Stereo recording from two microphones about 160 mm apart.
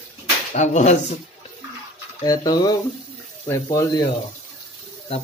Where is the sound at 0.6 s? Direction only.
45° left (ahead or behind).